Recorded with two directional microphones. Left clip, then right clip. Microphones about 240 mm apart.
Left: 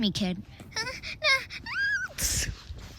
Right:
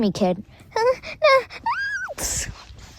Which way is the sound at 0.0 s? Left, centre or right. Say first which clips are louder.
Right 9 dB; centre.